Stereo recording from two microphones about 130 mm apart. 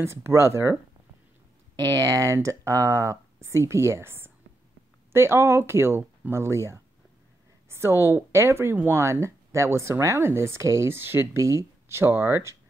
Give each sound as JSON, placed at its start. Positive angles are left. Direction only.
{"t": 0.0, "sound": "speech", "side_deg": -20}
{"t": 1.8, "sound": "speech", "side_deg": -25}